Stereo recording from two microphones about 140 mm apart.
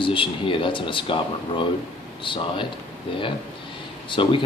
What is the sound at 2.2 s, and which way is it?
Speech, 35° left (ahead or behind).